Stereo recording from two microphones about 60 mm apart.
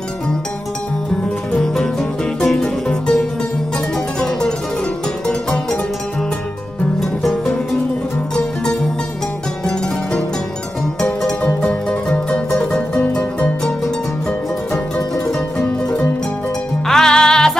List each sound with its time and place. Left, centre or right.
1.6 s music: centre
7.0 s music: centre
11.0 s music: centre
15.5 s music: left
16.8 s music: centre